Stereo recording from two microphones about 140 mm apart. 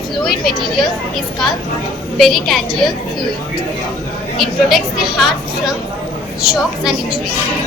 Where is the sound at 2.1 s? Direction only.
Centre (ahead or behind).